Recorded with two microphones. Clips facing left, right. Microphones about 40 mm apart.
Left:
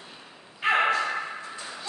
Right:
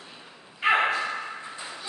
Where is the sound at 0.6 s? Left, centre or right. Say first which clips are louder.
Even; centre.